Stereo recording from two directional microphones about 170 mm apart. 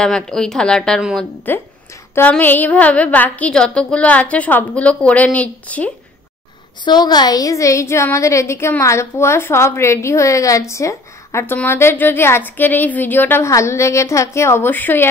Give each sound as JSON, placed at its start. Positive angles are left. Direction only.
{"t": 0.0, "sound": "a woman's voice", "side_deg": 5}
{"t": 6.8, "sound": "a woman's voice", "side_deg": 25}